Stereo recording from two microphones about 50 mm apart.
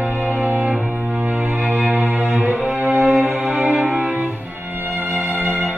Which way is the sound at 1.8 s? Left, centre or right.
Right.